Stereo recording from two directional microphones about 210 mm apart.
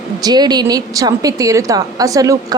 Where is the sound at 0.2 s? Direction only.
20° right (ahead or behind).